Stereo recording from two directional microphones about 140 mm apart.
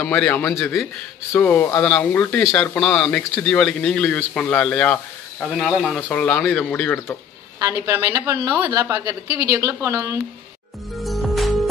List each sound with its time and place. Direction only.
0.0 s speech: 10° left (ahead or behind)
7.5 s a woman's voice: 20° right (ahead or behind)
11.0 s music: centre (ahead or behind)